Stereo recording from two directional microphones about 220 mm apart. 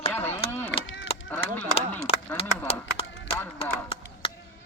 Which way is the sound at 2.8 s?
55° left (ahead or behind).